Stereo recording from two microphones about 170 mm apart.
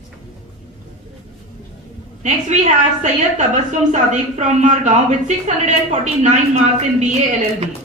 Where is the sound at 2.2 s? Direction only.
45° right (ahead or behind).